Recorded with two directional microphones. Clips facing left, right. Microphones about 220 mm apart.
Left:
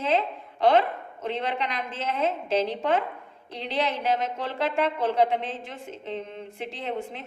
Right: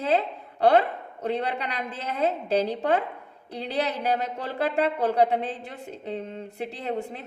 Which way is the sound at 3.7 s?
40° right (ahead or behind).